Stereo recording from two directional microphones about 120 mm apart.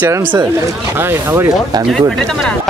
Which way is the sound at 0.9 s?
20° right (ahead or behind).